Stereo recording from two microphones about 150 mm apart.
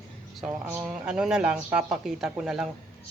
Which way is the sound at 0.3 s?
10° right (ahead or behind).